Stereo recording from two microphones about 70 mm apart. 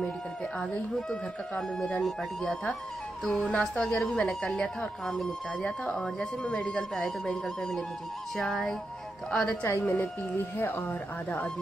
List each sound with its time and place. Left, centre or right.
2.0 s speech: centre
3.3 s speech: centre
3.9 s speech: centre
5.6 s speech: centre
9.6 s a woman's voice: left